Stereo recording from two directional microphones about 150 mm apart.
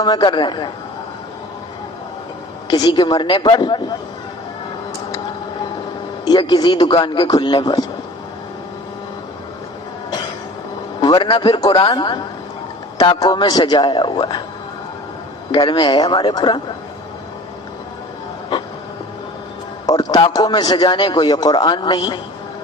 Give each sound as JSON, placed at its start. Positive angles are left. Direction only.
{"t": 0.0, "sound": "a man's voice", "side_deg": 30}
{"t": 2.6, "sound": "a man's voice", "side_deg": 30}
{"t": 6.2, "sound": "a man's voice", "side_deg": 30}
{"t": 11.0, "sound": "a man's voice", "side_deg": 35}
{"t": 15.5, "sound": "a man's voice", "side_deg": 30}
{"t": 19.9, "sound": "a man's voice", "side_deg": 25}